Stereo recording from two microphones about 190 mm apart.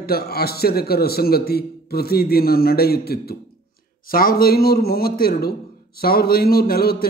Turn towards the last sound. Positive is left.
turn(degrees=55)  # may be behind; listen again after turning